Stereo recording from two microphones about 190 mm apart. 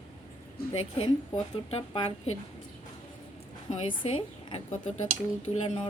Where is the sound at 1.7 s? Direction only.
30° left (ahead or behind).